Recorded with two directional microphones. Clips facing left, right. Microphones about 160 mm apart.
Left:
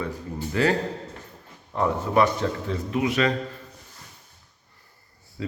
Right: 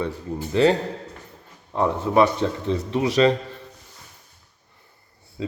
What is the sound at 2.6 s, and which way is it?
Speech, 30° right (ahead or behind).